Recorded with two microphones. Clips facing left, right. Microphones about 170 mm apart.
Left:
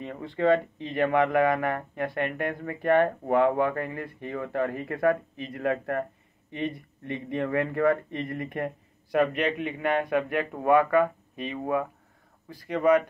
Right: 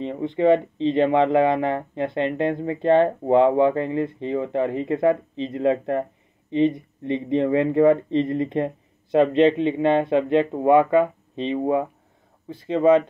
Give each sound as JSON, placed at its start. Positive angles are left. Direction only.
{"t": 0.0, "sound": "speech", "side_deg": -20}